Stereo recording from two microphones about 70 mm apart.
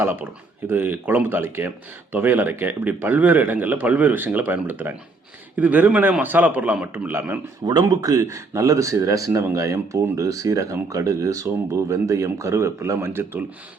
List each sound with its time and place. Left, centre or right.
0.0 s speech: right
7.6 s speech: right